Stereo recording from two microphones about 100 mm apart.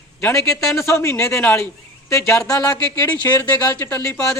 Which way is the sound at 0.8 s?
30° left (ahead or behind).